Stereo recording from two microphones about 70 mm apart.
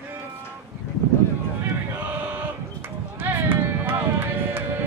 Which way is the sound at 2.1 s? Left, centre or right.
Right.